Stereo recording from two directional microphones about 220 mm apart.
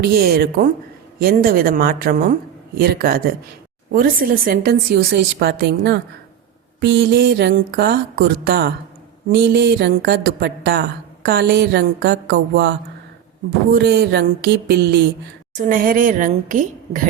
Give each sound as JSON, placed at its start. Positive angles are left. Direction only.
{"t": 0.0, "sound": "a woman's voice", "side_deg": -45}
{"t": 13.7, "sound": "a woman's voice", "side_deg": -50}
{"t": 15.5, "sound": "a woman's voice", "side_deg": -35}